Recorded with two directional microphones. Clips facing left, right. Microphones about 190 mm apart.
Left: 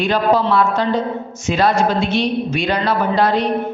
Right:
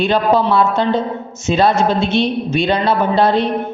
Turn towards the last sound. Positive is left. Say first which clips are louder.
# right 2 dB
turn(degrees=-25)  # may be behind; listen again after turning